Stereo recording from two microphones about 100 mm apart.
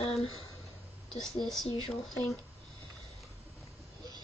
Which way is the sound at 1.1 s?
5° left (ahead or behind).